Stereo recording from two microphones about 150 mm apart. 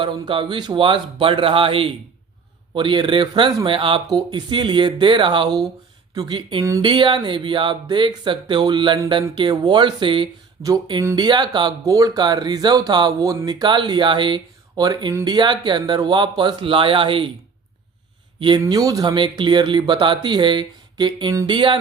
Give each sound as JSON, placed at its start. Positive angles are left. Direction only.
{"t": 0.0, "sound": "speech", "side_deg": -35}
{"t": 6.8, "sound": "speech", "side_deg": -30}
{"t": 18.3, "sound": "speech", "side_deg": -35}
{"t": 18.6, "sound": "speech", "side_deg": -25}